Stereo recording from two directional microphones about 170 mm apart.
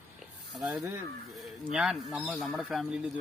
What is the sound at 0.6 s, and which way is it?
Speech, centre (ahead or behind).